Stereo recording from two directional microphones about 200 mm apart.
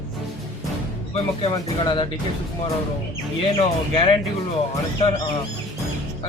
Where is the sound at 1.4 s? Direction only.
25° left (ahead or behind).